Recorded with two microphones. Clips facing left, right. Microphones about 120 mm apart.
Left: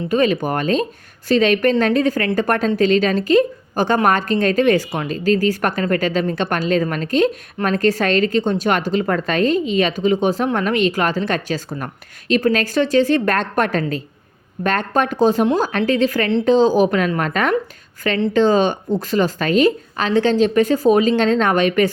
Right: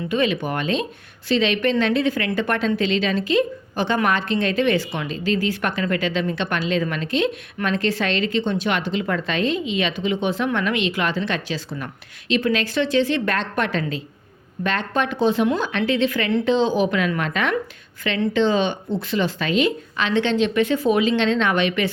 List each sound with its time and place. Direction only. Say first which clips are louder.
0.1 s a woman's voice: left 5 dB; 40° left (ahead or behind)